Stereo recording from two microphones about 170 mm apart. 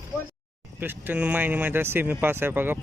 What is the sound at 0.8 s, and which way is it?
Speech, 10° right (ahead or behind).